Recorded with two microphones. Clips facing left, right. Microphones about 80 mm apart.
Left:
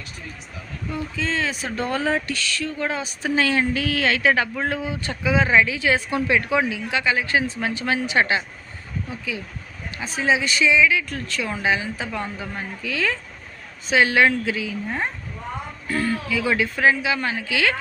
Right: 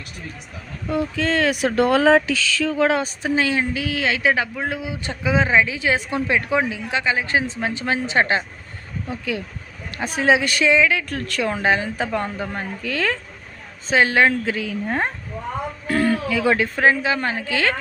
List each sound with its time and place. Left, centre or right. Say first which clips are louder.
0.9 s speech: right 6 dB; right
3.2 s a woman's voice: left 2 dB; centre
10.0 s speech: right 4 dB; right
13.8 s speech: right 1 dB; right
14.5 s speech: right 2 dB; right
15.9 s speech: right 4 dB; right